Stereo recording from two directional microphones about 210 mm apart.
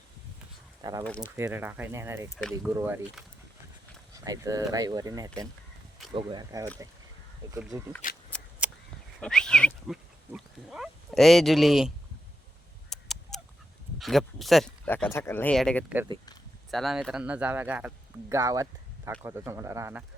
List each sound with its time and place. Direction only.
0.8 s speech: 15° right (ahead or behind)
1.0 s speech: 5° left (ahead or behind)
1.4 s speech: 10° right (ahead or behind)
2.3 s speech: 5° left (ahead or behind)
2.6 s speech: 10° right (ahead or behind)
4.1 s speech: 15° right (ahead or behind)
8.3 s shuffling cards: 5° left (ahead or behind)
9.2 s pig: 5° left (ahead or behind)
12.9 s honk: centre (ahead or behind)
14.0 s speech: centre (ahead or behind)